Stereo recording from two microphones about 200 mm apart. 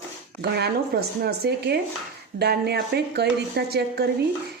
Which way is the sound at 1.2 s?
55° right (ahead or behind).